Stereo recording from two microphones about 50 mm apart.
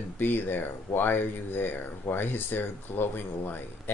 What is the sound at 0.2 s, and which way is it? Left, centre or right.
Speech, left.